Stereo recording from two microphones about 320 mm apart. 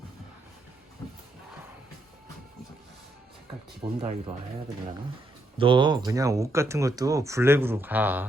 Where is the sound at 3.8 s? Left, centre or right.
Centre.